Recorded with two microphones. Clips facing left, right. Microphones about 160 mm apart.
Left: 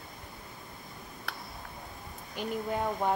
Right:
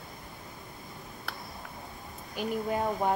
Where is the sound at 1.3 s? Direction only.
Centre (ahead or behind).